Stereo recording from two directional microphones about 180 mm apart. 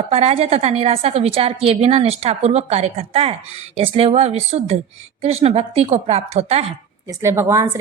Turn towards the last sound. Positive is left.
turn(degrees=-15)  # may be behind; listen again after turning